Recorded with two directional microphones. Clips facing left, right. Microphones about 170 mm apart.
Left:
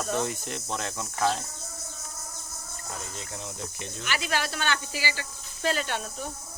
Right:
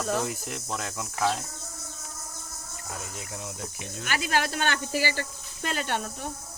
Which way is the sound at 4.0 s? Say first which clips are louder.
Right 3 dB; 45° right (ahead or behind).